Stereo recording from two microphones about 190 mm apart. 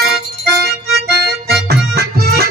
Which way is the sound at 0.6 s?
55° right (ahead or behind).